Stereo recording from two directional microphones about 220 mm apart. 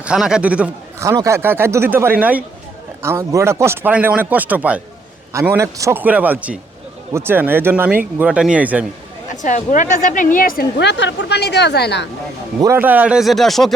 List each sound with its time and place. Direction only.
0.0 s a man's voice: 5° right (ahead or behind)
9.3 s a woman's voice: 35° left (ahead or behind)
12.5 s speech: 10° right (ahead or behind)